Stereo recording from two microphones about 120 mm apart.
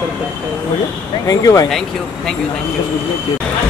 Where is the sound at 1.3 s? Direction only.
30° left (ahead or behind).